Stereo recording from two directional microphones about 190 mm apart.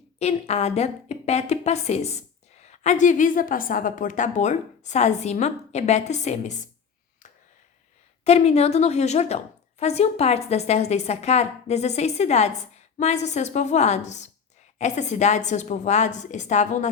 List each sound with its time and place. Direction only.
0.2 s a woman's voice: 35° left (ahead or behind)
8.2 s a woman's voice: 35° left (ahead or behind)